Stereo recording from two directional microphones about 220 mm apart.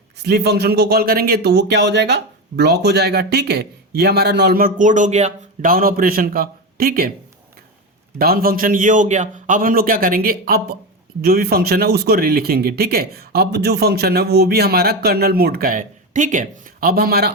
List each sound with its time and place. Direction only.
0.2 s a man's voice: 50° right (ahead or behind)
8.2 s a man's voice: 45° right (ahead or behind)